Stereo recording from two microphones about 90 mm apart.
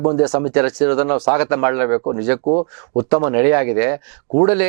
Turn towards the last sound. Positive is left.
turn(degrees=-15)  # may be behind; listen again after turning